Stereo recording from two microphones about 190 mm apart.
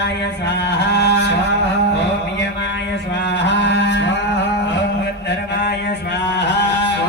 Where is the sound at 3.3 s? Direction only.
65° left (ahead or behind).